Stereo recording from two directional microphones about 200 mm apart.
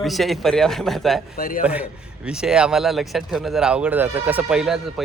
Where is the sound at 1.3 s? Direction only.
45° left (ahead or behind).